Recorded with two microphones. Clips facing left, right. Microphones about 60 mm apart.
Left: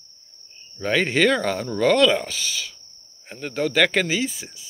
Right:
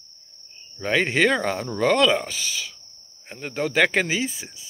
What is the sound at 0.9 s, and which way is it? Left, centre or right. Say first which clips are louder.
Speech: left 1 dB; centre.